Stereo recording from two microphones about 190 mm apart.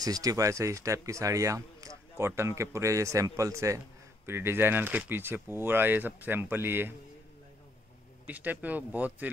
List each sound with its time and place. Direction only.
0.0 s speech: 20° right (ahead or behind)
8.3 s speech: 10° right (ahead or behind)